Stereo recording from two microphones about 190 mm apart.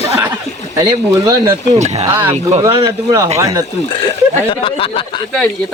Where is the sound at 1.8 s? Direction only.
35° right (ahead or behind).